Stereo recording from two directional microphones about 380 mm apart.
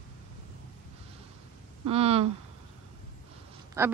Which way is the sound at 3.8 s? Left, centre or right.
Centre.